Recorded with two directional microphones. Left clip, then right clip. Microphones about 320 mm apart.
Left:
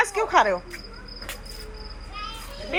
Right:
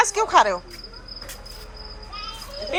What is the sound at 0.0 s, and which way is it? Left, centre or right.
Speech, centre.